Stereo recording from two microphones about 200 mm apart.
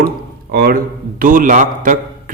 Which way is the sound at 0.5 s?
50° right (ahead or behind).